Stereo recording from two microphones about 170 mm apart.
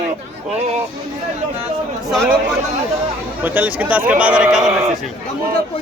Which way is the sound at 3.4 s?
10° right (ahead or behind).